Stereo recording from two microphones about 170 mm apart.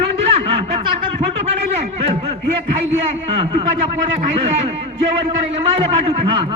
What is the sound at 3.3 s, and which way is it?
Speech, 35° right (ahead or behind).